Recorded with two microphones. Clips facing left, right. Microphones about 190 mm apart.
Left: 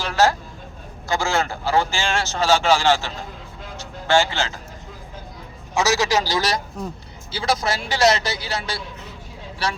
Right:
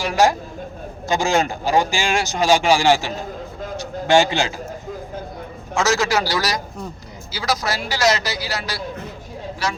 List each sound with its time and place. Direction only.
0.0 s a man's voice: 15° right (ahead or behind)
5.7 s speech: 20° left (ahead or behind)